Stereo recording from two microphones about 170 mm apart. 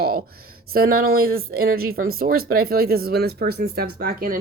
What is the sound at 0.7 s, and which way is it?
Speech, 60° right (ahead or behind).